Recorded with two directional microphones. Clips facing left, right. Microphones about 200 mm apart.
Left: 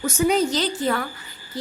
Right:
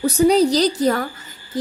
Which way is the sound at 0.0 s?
35° right (ahead or behind).